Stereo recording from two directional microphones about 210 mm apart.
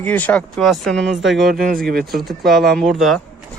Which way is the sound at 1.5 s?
45° right (ahead or behind).